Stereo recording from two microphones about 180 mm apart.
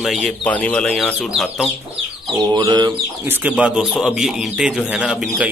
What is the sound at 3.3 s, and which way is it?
Speech, 10° right (ahead or behind).